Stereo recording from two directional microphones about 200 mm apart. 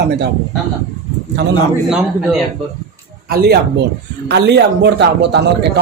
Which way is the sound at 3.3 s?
50° right (ahead or behind).